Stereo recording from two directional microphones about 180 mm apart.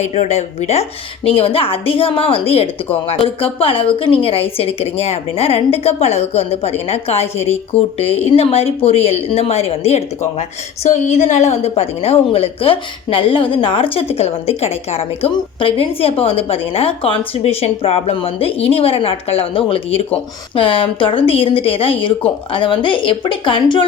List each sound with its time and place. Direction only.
0.0 s a woman's voice: 40° left (ahead or behind)